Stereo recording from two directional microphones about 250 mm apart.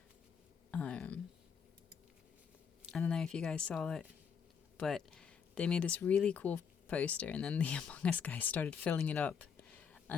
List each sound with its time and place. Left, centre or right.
0.7 s speech: centre
2.9 s speech: centre
9.8 s a sound: centre